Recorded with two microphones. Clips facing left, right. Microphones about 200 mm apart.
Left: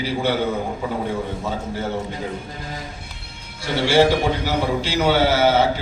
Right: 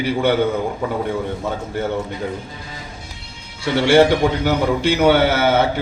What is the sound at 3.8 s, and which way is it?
A man's voice, 60° right (ahead or behind).